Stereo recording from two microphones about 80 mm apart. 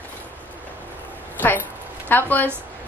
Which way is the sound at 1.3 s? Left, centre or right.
Left.